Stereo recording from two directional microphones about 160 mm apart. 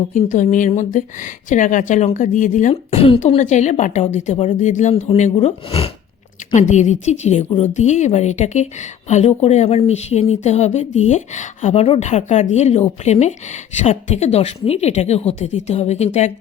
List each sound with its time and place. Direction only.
0.1 s a woman's voice: 50° left (ahead or behind)
3.0 s a woman's voice: 40° left (ahead or behind)
6.5 s a woman's voice: 50° left (ahead or behind)